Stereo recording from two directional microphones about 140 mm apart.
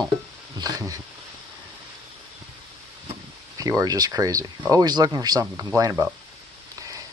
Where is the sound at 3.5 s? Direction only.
25° right (ahead or behind).